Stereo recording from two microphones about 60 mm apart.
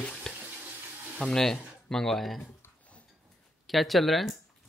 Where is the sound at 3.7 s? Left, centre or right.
Centre.